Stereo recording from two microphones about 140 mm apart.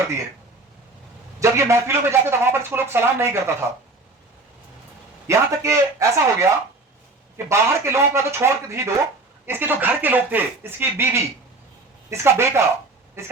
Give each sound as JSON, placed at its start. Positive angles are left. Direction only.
{"t": 1.4, "sound": "speech", "side_deg": -20}
{"t": 5.3, "sound": "speech", "side_deg": -20}